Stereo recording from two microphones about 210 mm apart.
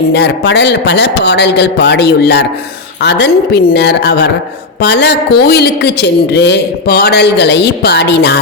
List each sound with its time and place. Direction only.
0.1 s a woman's voice: 55° left (ahead or behind)